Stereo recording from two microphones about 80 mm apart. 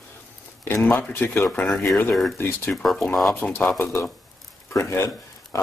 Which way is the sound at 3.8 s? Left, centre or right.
Left.